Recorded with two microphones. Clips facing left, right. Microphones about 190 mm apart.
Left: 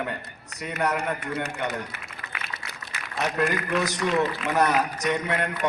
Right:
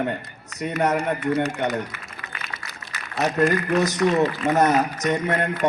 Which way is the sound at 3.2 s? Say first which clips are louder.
Right 5 dB; 45° right (ahead or behind).